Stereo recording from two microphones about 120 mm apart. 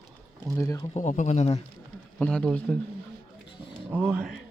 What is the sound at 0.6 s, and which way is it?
Speech, 30° left (ahead or behind).